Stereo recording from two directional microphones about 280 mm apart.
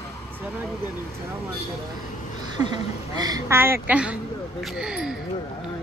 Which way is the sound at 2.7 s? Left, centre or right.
Centre.